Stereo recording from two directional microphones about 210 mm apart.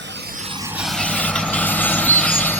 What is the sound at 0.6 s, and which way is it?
Vehicle, 5° right (ahead or behind).